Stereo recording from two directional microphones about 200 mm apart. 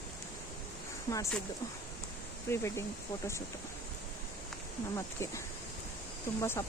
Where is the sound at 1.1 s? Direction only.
15° left (ahead or behind).